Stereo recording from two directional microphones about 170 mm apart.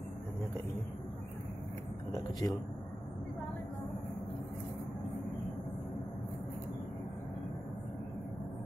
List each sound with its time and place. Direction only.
2.4 s speech: 20° left (ahead or behind)